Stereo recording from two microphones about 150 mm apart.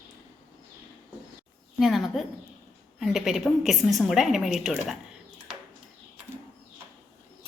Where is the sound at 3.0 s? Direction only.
Centre (ahead or behind).